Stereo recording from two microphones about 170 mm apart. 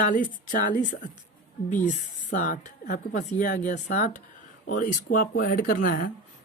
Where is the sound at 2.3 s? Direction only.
55° left (ahead or behind).